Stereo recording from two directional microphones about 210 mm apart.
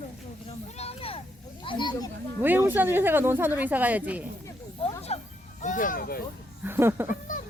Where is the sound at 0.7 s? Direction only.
30° left (ahead or behind).